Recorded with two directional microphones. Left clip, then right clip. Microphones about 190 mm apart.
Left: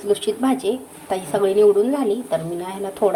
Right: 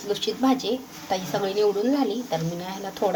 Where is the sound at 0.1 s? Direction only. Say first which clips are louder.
Left 4 dB; 20° left (ahead or behind).